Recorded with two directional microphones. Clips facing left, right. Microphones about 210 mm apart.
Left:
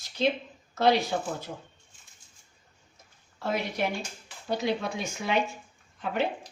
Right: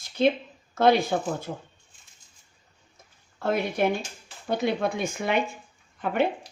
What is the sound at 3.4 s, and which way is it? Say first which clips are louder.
Speech: right 5 dB; 55° right (ahead or behind).